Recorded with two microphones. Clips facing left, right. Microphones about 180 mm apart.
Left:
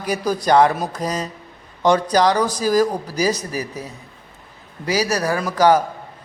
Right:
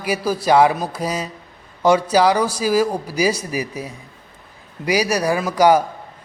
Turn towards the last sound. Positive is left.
turn(degrees=-10)  # may be behind; listen again after turning